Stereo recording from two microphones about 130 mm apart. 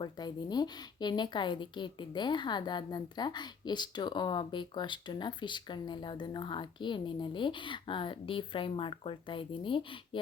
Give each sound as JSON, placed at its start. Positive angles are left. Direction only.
{"t": 0.0, "sound": "a woman's voice", "side_deg": 35}